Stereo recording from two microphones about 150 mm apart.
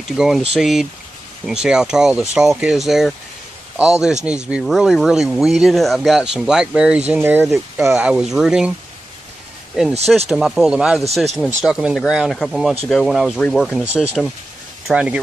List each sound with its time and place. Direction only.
0.2 s speech: 5° right (ahead or behind)
7.9 s speech: 5° right (ahead or behind)
10.3 s speech: 5° right (ahead or behind)